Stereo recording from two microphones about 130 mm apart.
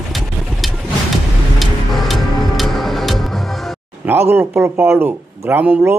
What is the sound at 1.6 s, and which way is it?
Music, centre (ahead or behind).